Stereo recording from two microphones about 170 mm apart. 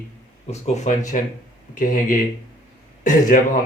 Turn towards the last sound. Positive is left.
turn(degrees=50)  # may be behind; listen again after turning